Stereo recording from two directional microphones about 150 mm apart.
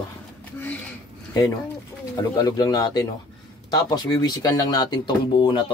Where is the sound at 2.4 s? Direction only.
25° left (ahead or behind).